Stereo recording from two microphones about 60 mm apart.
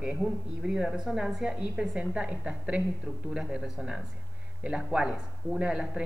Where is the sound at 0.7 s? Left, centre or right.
Centre.